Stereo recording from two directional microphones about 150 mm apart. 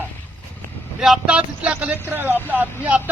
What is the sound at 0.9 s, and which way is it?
A man's voice, 5° right (ahead or behind).